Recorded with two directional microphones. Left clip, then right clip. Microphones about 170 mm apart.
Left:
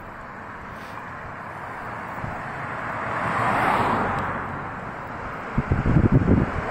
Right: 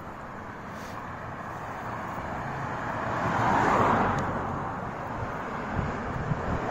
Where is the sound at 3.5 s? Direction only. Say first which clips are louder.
Left 2 dB; 30° left (ahead or behind).